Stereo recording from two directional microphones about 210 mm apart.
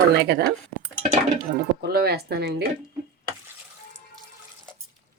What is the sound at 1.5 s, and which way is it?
A woman's voice, 50° right (ahead or behind).